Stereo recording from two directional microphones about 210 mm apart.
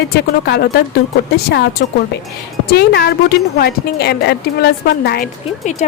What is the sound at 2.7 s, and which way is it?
Speech, 50° left (ahead or behind).